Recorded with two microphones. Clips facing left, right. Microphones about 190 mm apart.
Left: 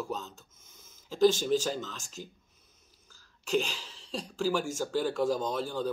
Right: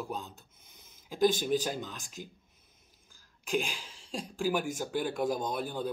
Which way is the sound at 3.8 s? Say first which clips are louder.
Left 1 dB; 45° right (ahead or behind).